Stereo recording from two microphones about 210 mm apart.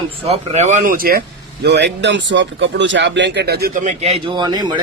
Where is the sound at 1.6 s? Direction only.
55° right (ahead or behind); by 4.1 s 35° right (ahead or behind).